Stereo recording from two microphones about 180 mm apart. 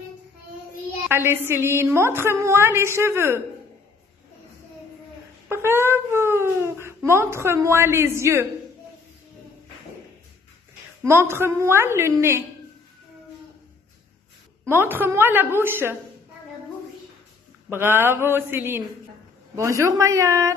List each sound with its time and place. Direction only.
1.0 s a woman's voice: 10° right (ahead or behind)
5.5 s wail: 15° right (ahead or behind)
7.1 s a woman's voice: 15° right (ahead or behind)
11.1 s a woman's voice: 15° right (ahead or behind)
14.7 s a woman's voice: 10° right (ahead or behind)
17.6 s a woman's voice: 10° right (ahead or behind)